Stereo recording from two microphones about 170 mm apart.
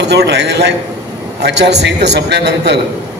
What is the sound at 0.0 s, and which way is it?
A man's voice, 80° right.